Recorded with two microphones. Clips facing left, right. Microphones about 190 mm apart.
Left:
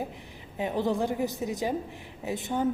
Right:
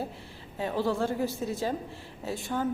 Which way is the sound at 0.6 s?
20° left (ahead or behind).